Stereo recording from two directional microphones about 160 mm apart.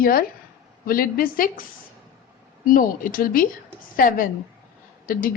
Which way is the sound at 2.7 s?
60° left (ahead or behind).